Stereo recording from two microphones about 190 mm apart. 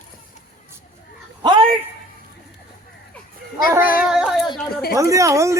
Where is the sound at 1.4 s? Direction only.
25° right (ahead or behind).